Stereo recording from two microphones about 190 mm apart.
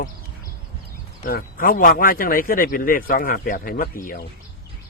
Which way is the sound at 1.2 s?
50° left (ahead or behind).